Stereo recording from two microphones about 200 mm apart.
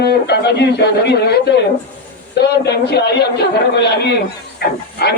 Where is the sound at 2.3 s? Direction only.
55° left (ahead or behind).